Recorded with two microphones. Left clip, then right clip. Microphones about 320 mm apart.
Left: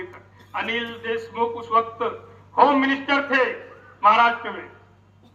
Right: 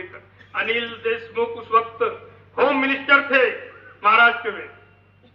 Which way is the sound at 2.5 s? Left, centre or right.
Centre.